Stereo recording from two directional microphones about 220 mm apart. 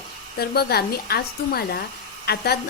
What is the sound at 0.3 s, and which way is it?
A woman's voice, 45° left (ahead or behind).